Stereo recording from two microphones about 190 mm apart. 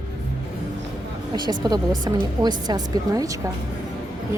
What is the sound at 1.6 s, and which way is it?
Speech, 20° right (ahead or behind).